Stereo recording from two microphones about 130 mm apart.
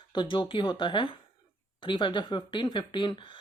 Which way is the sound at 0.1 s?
35° left (ahead or behind).